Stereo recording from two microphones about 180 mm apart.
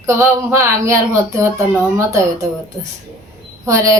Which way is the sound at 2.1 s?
20° right (ahead or behind).